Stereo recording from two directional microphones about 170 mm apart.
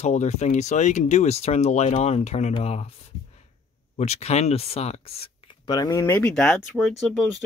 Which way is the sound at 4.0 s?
40° left (ahead or behind).